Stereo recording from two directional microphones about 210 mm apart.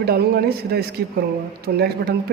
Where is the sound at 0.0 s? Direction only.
50° right (ahead or behind).